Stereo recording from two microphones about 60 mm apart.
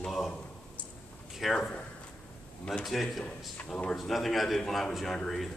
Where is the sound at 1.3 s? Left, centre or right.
Centre.